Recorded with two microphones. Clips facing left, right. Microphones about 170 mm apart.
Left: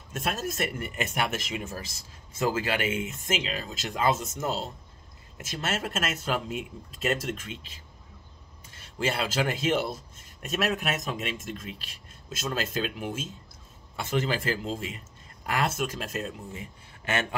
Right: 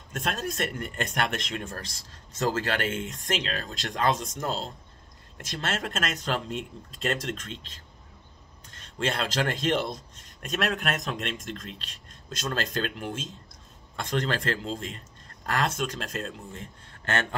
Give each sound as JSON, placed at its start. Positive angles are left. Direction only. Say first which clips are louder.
{"t": 0.1, "sound": "speech", "louder": "even", "side_deg": 5}